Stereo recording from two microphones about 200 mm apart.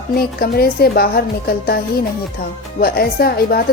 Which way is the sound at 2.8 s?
50° left (ahead or behind).